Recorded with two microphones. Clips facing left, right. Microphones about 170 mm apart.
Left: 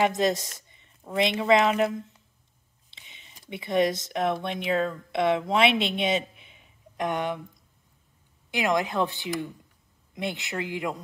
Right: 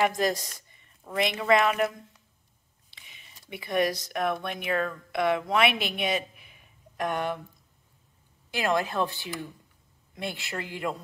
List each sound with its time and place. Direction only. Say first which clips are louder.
0.0 s a woman's voice: left 2 dB; 25° left (ahead or behind)
0.5 s a sound: left 1 dB; 25° left (ahead or behind)
1.1 s a woman's voice: left 2 dB; 25° left (ahead or behind)
8.5 s a woman's voice: left 1 dB; 20° left (ahead or behind)